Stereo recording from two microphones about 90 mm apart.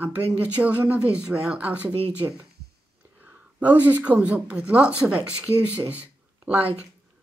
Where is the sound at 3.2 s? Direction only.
20° right (ahead or behind).